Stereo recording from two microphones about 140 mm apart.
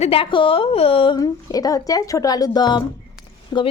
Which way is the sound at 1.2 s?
25° left (ahead or behind).